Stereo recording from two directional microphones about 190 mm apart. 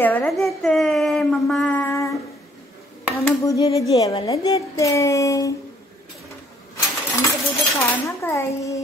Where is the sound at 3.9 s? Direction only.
20° left (ahead or behind).